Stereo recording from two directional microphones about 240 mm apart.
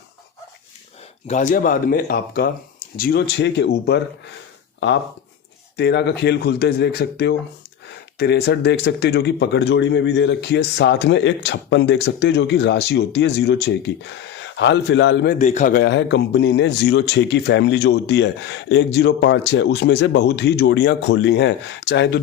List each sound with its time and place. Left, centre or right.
1.3 s a man's voice: left
5.7 s a man's voice: left